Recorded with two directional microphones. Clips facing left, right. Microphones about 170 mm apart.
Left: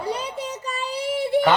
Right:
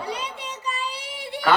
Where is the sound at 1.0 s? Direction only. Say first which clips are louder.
Left 12 dB; 45° left (ahead or behind).